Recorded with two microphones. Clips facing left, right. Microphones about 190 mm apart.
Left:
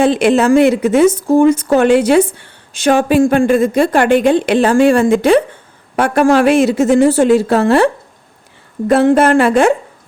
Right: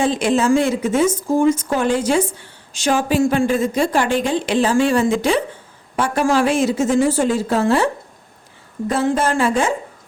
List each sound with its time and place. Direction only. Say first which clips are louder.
0.0 s a woman's voice: left 6 dB; 65° left (ahead or behind)
8.9 s a woman's voice: left 9 dB; 60° left (ahead or behind)